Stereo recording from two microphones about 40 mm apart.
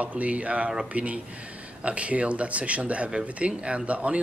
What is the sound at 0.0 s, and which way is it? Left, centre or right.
Speech, right.